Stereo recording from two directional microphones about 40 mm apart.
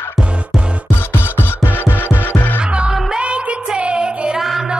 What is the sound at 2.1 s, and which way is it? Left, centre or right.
Music, left.